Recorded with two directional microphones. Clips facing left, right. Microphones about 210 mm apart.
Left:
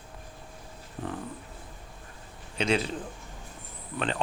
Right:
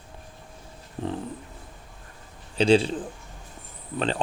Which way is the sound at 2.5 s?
30° right (ahead or behind).